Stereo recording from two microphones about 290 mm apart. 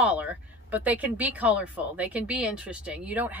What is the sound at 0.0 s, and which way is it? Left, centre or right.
Speech, centre.